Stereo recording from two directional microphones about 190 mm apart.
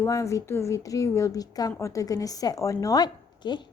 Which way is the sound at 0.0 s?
15° left (ahead or behind).